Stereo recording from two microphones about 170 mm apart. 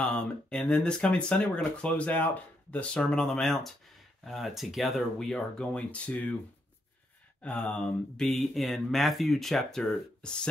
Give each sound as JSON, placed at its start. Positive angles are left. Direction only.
{"t": 0.0, "sound": "speech", "side_deg": 5}
{"t": 7.4, "sound": "speech", "side_deg": 5}